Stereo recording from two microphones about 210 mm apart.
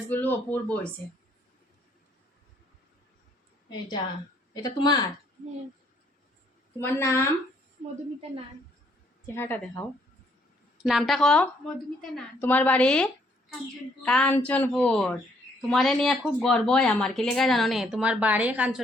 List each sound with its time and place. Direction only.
0.1 s a woman's voice: 10° left (ahead or behind)
4.5 s speech: 20° left (ahead or behind)
6.7 s a woman's voice: 10° left (ahead or behind)
9.2 s a woman's voice: 10° left (ahead or behind)
10.8 s a woman's voice: centre (ahead or behind)